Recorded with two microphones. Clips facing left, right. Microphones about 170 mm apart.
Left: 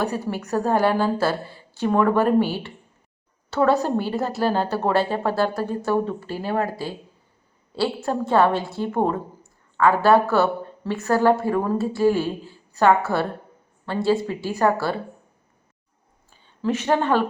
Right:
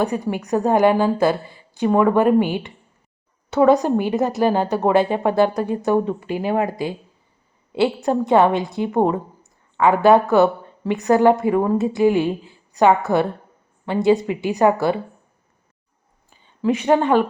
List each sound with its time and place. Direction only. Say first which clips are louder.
0.0 s a woman's voice: right 4 dB; 15° right (ahead or behind)
16.6 s a woman's voice: right 4 dB; 10° right (ahead or behind)